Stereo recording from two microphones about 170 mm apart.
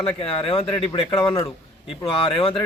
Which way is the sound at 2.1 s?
30° left (ahead or behind).